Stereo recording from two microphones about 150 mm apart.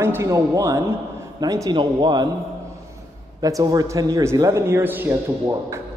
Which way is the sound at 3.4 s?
25° right (ahead or behind).